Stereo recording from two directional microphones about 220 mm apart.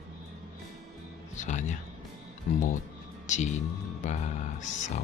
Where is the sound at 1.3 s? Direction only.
35° left (ahead or behind).